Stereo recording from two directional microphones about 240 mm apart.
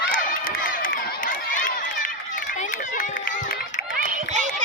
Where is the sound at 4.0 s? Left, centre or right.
Right.